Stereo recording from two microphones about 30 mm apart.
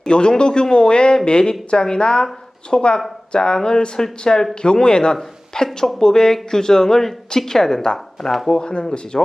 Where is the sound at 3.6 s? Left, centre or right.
Left.